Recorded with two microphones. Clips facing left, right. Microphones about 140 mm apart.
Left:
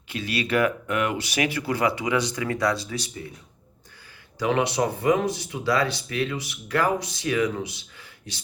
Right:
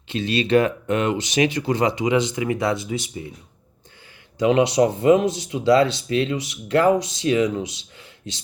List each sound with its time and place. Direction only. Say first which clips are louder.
0.1 s speech: right 7 dB; 25° right (ahead or behind)
4.4 s speech: right 6 dB; 20° right (ahead or behind)